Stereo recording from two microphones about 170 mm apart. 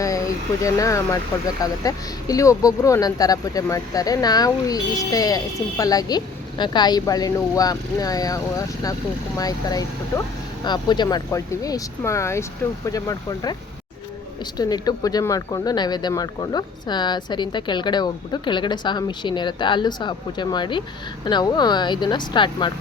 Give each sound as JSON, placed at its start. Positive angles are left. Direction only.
{"t": 0.0, "sound": "speech", "side_deg": 20}
{"t": 14.6, "sound": "speech", "side_deg": 20}